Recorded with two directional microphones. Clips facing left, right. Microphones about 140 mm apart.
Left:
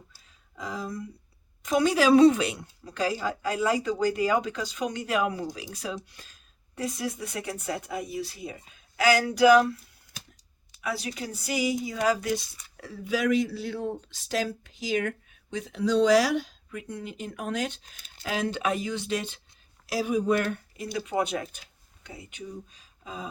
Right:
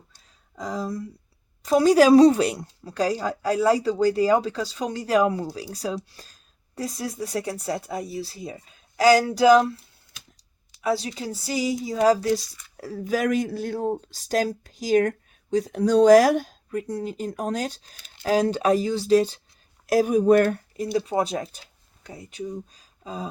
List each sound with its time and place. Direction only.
0.5 s speech: 40° right (ahead or behind)
19.9 s speech: 45° right (ahead or behind)